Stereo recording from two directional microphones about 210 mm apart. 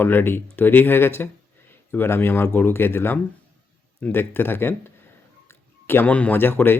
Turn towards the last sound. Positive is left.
turn(degrees=10)  # may be behind; listen again after turning